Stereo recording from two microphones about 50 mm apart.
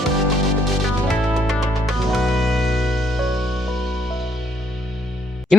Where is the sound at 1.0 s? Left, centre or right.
Centre.